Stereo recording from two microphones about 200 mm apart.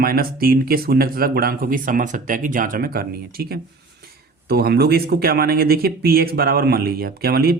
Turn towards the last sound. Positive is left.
turn(degrees=-50)  # may be behind; listen again after turning